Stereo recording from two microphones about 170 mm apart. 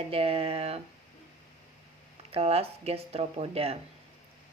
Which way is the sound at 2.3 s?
35° right (ahead or behind).